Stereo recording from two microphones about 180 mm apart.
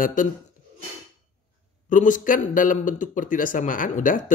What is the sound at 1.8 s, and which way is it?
A man's voice, 45° left (ahead or behind).